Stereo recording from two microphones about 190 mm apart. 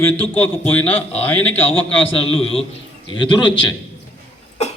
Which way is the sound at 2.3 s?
30° left (ahead or behind).